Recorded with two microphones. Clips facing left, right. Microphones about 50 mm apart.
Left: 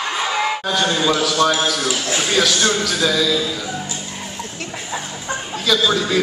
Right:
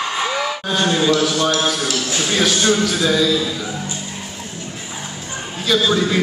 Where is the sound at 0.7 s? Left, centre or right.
Right.